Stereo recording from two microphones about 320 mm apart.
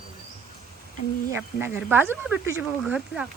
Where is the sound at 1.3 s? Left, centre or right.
Centre.